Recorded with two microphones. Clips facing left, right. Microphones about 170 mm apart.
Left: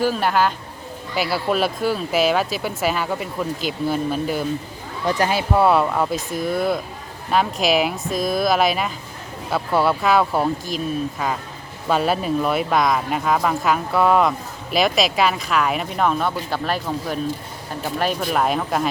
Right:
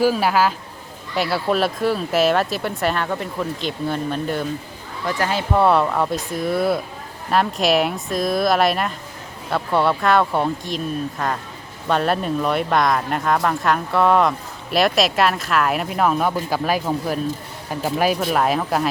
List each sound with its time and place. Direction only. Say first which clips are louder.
0.0 s speech: right 2 dB; 5° right (ahead or behind)
18.0 s speech: right 1 dB; 5° right (ahead or behind)